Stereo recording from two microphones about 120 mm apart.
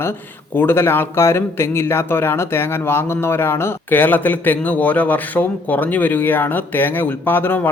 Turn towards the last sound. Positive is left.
turn(degrees=15)  # may be behind; listen again after turning